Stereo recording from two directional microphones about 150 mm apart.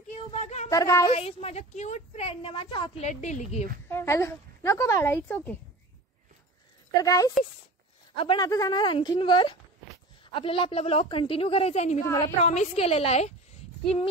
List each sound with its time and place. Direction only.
0.3 s speech: 50° left (ahead or behind)
0.7 s speech: 20° left (ahead or behind)
1.1 s a woman's voice: 40° left (ahead or behind)
3.9 s a woman's voice: 15° left (ahead or behind)
6.9 s speech: 25° left (ahead or behind)
8.2 s a woman's voice: 35° left (ahead or behind)
8.5 s a woman's voice: 25° left (ahead or behind); by 13.3 s 45° left (ahead or behind)